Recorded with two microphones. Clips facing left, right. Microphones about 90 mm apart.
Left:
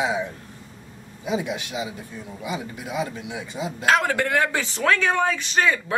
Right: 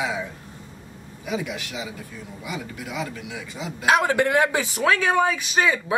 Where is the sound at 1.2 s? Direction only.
25° left (ahead or behind).